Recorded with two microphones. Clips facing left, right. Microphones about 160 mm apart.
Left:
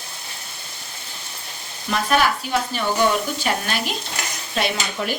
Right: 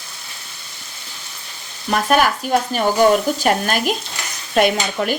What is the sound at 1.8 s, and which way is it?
A woman's voice, 45° right (ahead or behind).